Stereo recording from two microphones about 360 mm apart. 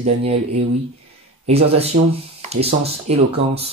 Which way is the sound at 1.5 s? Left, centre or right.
Centre.